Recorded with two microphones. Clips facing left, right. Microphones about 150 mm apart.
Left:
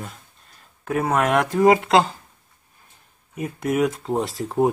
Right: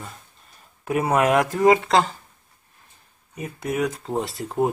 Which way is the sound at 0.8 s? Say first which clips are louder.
Right 1 dB; 5° right (ahead or behind).